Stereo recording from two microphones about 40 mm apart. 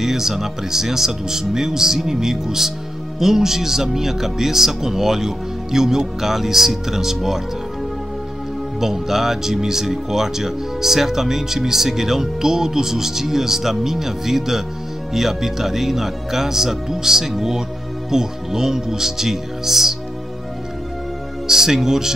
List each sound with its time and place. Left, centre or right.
0.0 s speech: centre
8.8 s speech: centre
21.5 s speech: centre